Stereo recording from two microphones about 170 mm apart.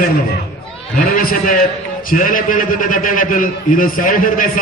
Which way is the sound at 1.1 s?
55° left (ahead or behind).